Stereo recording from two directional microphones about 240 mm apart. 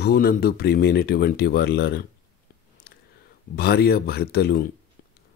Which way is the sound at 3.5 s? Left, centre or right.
Left.